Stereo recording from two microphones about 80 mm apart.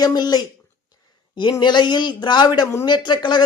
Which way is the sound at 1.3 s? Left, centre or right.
Left.